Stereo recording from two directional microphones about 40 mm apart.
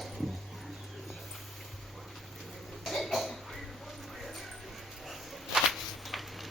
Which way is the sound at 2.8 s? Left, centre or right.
Centre.